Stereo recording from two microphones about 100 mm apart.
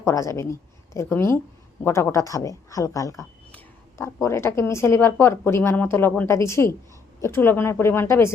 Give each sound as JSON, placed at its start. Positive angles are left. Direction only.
{"t": 0.0, "sound": "a woman's voice", "side_deg": 30}